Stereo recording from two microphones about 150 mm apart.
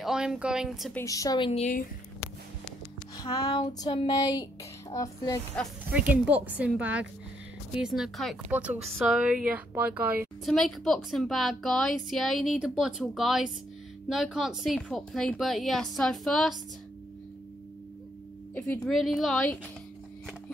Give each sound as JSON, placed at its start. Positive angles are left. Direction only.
{"t": 0.0, "sound": "a woman's voice", "side_deg": -5}
{"t": 0.9, "sound": "child singing", "side_deg": 20}
{"t": 3.4, "sound": "child singing", "side_deg": 25}
{"t": 5.9, "sound": "a woman's voice", "side_deg": -10}
{"t": 10.4, "sound": "a woman's voice", "side_deg": 0}
{"t": 18.5, "sound": "speech", "side_deg": 10}
{"t": 18.9, "sound": "a woman's voice", "side_deg": 0}